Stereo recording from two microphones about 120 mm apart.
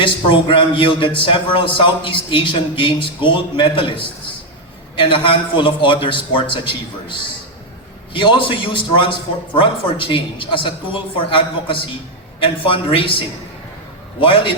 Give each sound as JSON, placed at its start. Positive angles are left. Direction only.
{"t": 0.0, "sound": "a man's voice", "side_deg": 45}
{"t": 14.2, "sound": "a man's voice", "side_deg": 50}